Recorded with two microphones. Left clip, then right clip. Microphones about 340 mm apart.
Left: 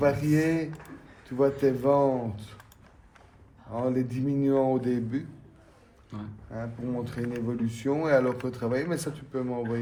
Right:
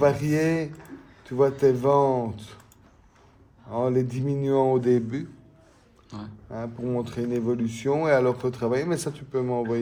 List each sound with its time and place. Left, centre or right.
0.0 s a man's voice: right
3.7 s a man's voice: right
6.1 s speech: centre
6.5 s a man's voice: right